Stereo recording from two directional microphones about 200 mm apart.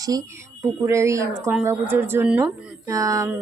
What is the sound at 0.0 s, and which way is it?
Speech, 20° right (ahead or behind).